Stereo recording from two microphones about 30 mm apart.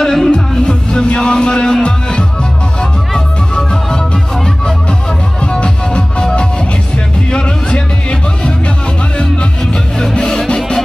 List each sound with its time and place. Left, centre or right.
0.0 s music: centre
0.3 s music: left
5.4 s music: left
7.2 s music: left
10.1 s music: left